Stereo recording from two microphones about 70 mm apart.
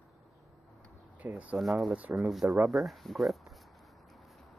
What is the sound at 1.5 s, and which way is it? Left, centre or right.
Speech, centre.